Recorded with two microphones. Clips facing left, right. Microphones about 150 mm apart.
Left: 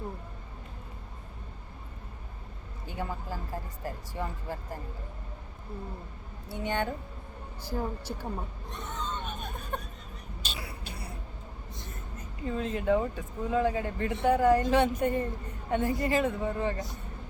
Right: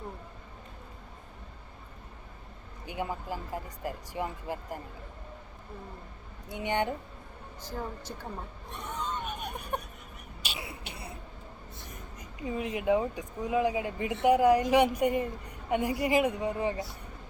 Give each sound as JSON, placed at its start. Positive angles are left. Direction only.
{"t": 2.8, "sound": "speech", "side_deg": -15}
{"t": 6.5, "sound": "speech", "side_deg": -20}
{"t": 7.6, "sound": "a woman's voice", "side_deg": 10}
{"t": 8.9, "sound": "a sound", "side_deg": -10}
{"t": 13.1, "sound": "speech", "side_deg": -15}